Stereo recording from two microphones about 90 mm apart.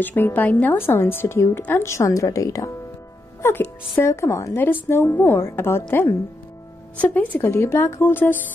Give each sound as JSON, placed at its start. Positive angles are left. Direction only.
{"t": 0.0, "sound": "a woman's voice", "side_deg": 20}
{"t": 3.4, "sound": "a woman's voice", "side_deg": 25}